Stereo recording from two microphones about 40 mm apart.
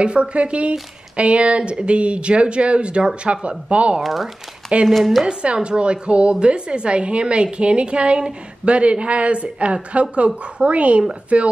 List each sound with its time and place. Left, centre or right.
0.0 s speech: right
4.0 s a woman's voice: centre
5.2 s a woman's voice: right